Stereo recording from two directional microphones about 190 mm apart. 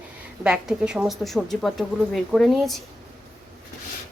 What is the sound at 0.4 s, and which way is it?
A woman's voice, 5° right (ahead or behind).